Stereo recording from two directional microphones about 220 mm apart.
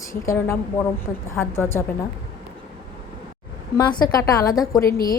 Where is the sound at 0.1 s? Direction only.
10° left (ahead or behind).